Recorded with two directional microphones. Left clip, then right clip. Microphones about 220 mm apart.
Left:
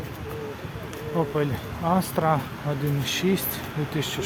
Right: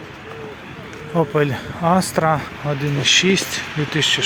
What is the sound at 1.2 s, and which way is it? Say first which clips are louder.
Speech: right 8 dB; 30° right (ahead or behind).